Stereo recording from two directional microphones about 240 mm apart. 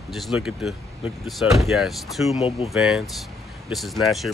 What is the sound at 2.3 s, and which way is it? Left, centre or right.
Speech, left.